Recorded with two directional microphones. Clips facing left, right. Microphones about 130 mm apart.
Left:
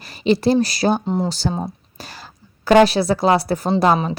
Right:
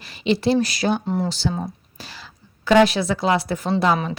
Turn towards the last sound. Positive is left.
turn(degrees=40)  # may be behind; listen again after turning